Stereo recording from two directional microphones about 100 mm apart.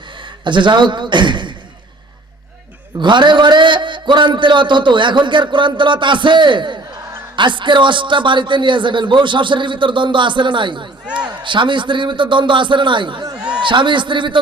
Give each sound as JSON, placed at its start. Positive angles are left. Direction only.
{"t": 0.2, "sound": "speech", "side_deg": -55}
{"t": 3.0, "sound": "a man's voice", "side_deg": -50}
{"t": 11.0, "sound": "a man's voice", "side_deg": -10}
{"t": 11.3, "sound": "a man's voice", "side_deg": -50}